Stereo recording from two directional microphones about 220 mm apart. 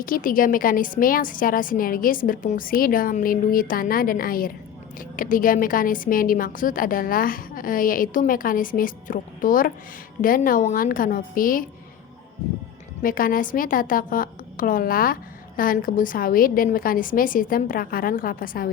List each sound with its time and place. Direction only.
0.0 s a woman's voice: 40° left (ahead or behind)
13.0 s a woman's voice: 40° left (ahead or behind)